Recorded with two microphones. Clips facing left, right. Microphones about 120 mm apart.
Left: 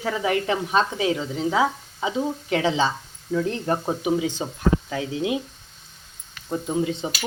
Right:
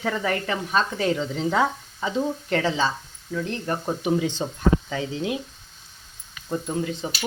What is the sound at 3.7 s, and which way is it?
Speech, 15° left (ahead or behind).